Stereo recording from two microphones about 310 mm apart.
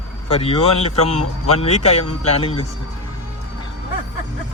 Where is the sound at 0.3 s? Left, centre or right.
Centre.